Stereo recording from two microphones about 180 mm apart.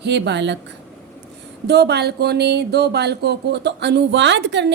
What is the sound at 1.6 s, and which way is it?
Speech, 65° right (ahead or behind).